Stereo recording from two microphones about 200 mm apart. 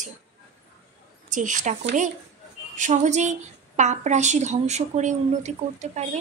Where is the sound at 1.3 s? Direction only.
40° right (ahead or behind).